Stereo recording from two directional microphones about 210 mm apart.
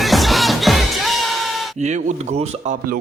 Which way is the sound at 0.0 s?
Centre (ahead or behind).